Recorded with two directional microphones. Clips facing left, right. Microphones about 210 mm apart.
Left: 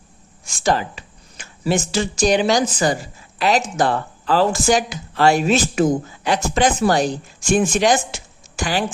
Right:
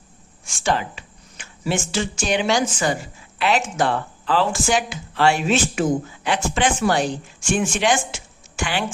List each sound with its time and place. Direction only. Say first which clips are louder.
0.4 s speech: left 3 dB; 35° left (ahead or behind)